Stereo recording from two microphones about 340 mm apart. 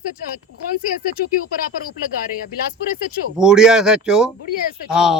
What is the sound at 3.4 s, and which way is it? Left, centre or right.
Speech, centre.